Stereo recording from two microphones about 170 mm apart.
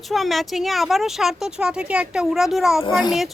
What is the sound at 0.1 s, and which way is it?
A woman's voice, centre (ahead or behind).